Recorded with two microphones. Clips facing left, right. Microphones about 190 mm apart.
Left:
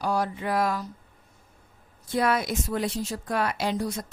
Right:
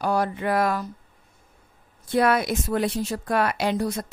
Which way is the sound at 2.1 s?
60° right (ahead or behind).